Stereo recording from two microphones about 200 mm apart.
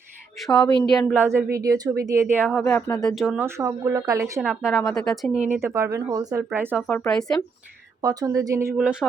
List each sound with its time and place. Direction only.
0.4 s a woman's voice: 5° left (ahead or behind)
1.1 s speech: 10° right (ahead or behind)
4.4 s a woman's voice: centre (ahead or behind)
5.5 s speech: 15° right (ahead or behind)
6.8 s a woman's voice: 5° left (ahead or behind)
8.0 s speech: 20° right (ahead or behind)